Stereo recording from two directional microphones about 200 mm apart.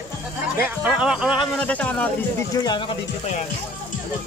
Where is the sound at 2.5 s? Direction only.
20° left (ahead or behind).